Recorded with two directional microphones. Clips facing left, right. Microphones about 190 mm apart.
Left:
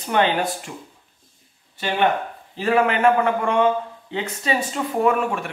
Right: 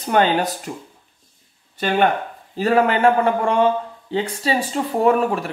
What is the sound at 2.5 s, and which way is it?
Speech, 40° right (ahead or behind).